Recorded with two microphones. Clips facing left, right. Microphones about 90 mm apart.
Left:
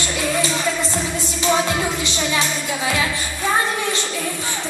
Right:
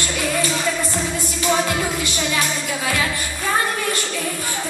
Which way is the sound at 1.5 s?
20° left (ahead or behind).